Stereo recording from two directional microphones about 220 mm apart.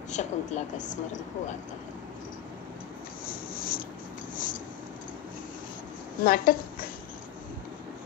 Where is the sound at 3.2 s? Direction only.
40° left (ahead or behind).